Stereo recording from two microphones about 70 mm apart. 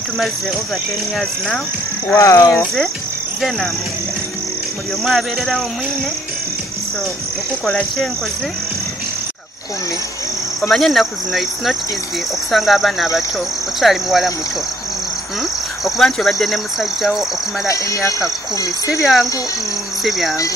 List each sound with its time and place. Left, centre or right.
2.1 s speech: left
2.5 s speech: centre
5.0 s speech: centre
7.6 s speech: centre
10.7 s speech: centre
15.8 s speech: centre
17.6 s speech: left
18.9 s speech: centre